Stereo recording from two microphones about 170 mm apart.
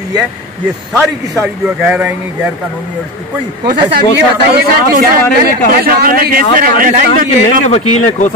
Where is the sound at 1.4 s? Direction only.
10° right (ahead or behind).